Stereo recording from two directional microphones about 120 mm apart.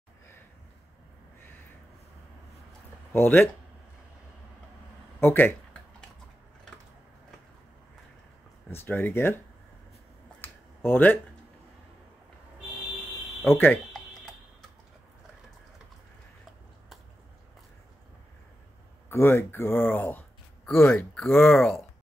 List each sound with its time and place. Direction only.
3.1 s speech: 20° left (ahead or behind)
5.2 s a sound: 15° left (ahead or behind)
8.6 s speech: 20° left (ahead or behind)
10.4 s a sound: 15° left (ahead or behind)
13.4 s speech: 15° left (ahead or behind)
19.0 s speech: 20° left (ahead or behind)
21.5 s speech: centre (ahead or behind)